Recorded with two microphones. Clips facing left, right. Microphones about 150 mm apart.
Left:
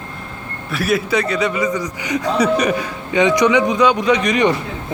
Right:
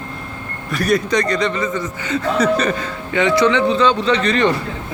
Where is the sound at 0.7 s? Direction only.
5° left (ahead or behind).